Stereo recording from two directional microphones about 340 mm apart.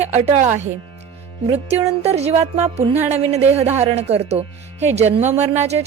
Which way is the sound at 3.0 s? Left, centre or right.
Centre.